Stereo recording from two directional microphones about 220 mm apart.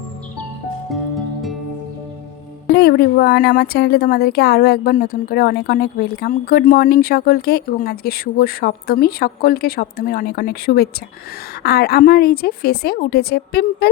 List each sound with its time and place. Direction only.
0.9 s music: centre (ahead or behind)
2.7 s a woman's voice: 45° left (ahead or behind)